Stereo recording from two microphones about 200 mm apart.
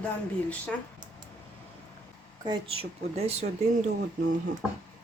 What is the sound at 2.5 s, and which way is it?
Speech, 30° right (ahead or behind).